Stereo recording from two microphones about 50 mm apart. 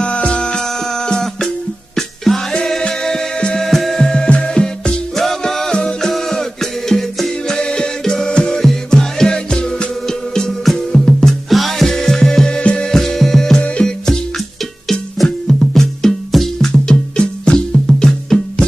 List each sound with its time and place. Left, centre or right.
0.0 s music: left
3.6 s music: centre
5.1 s music: centre
12.4 s music: centre
13.6 s music: left
14.9 s music: centre